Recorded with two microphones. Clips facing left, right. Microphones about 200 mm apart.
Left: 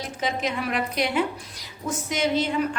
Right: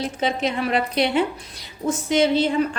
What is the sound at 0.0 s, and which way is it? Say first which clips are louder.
A woman's voice: right 4 dB; 30° right (ahead or behind).